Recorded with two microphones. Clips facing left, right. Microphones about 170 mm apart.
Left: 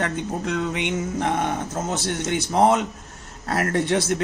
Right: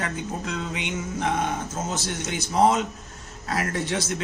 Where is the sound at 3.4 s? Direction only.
55° left (ahead or behind).